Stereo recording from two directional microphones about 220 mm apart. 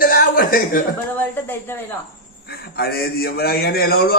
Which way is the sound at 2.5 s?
45° left (ahead or behind).